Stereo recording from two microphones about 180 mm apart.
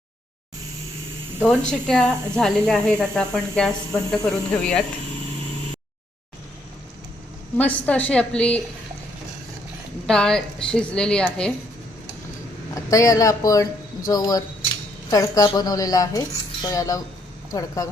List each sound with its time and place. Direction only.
1.4 s speech: 5° left (ahead or behind)
7.5 s a woman's voice: 10° left (ahead or behind)
10.1 s speech: 5° left (ahead or behind)
12.7 s a woman's voice: 20° left (ahead or behind)